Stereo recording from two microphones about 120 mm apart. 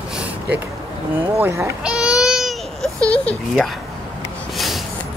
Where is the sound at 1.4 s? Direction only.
25° right (ahead or behind).